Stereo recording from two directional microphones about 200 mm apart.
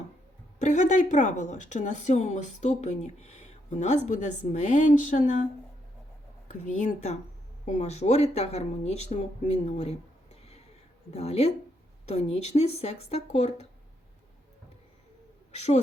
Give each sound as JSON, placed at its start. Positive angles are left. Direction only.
{"t": 0.6, "sound": "speech", "side_deg": 35}
{"t": 6.5, "sound": "speech", "side_deg": 40}
{"t": 11.1, "sound": "speech", "side_deg": 30}